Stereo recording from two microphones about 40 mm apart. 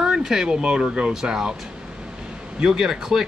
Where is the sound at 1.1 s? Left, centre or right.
Centre.